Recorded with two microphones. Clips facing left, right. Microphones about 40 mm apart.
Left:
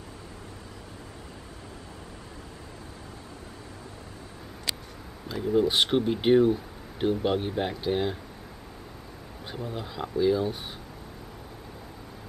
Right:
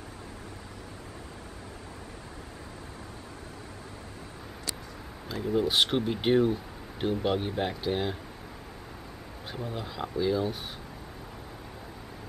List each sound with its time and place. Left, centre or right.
4.7 s a sound: left
5.3 s speech: centre
9.5 s speech: centre